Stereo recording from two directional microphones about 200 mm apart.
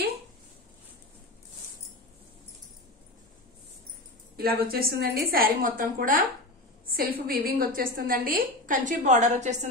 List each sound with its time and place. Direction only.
4.4 s a woman's voice: 50° right (ahead or behind)